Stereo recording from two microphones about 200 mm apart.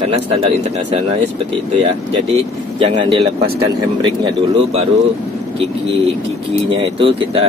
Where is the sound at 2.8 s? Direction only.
25° right (ahead or behind).